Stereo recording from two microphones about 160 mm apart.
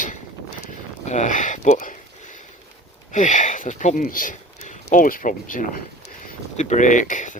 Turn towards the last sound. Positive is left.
turn(degrees=50)  # may be behind; listen again after turning